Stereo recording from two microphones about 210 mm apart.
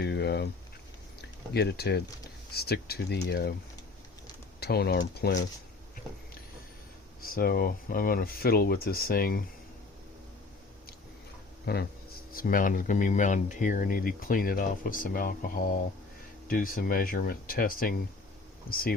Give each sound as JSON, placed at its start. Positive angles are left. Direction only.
{"t": 0.0, "sound": "a sound", "side_deg": 55}
{"t": 1.2, "sound": "speech", "side_deg": 50}
{"t": 4.6, "sound": "speech", "side_deg": 50}
{"t": 7.2, "sound": "speech", "side_deg": 45}
{"t": 11.6, "sound": "speech", "side_deg": 50}